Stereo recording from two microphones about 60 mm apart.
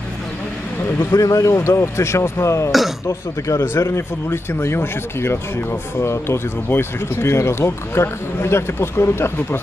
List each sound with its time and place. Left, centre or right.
1.2 s speech: left
3.6 s speech: left